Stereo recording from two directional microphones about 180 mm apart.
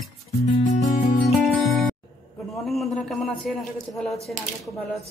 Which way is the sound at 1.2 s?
Centre (ahead or behind).